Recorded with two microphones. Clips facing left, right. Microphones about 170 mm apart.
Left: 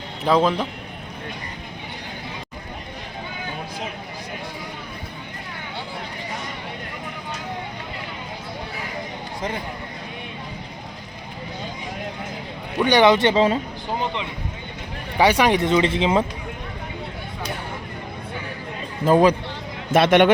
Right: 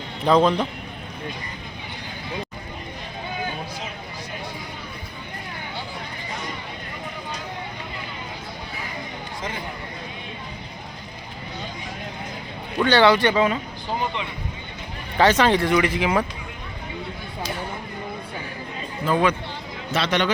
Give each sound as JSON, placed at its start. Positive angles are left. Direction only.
{"t": 0.3, "sound": "a man's voice", "side_deg": 5}
{"t": 12.8, "sound": "speech", "side_deg": 15}
{"t": 15.2, "sound": "speech", "side_deg": 10}
{"t": 19.0, "sound": "speech", "side_deg": 40}
{"t": 19.9, "sound": "speech", "side_deg": 55}